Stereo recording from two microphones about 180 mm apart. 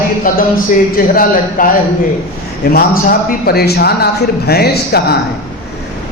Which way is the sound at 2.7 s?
55° left (ahead or behind).